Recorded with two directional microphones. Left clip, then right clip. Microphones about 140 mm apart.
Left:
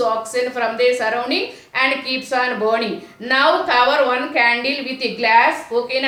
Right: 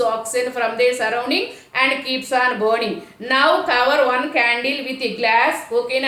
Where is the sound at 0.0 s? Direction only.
20° right (ahead or behind).